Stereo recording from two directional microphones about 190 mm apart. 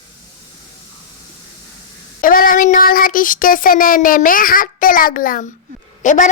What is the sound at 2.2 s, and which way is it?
Child singing, 45° left (ahead or behind).